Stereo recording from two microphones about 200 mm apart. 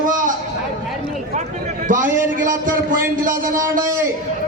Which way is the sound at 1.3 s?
40° right (ahead or behind).